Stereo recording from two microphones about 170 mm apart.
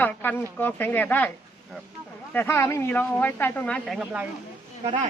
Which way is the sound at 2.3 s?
15° left (ahead or behind).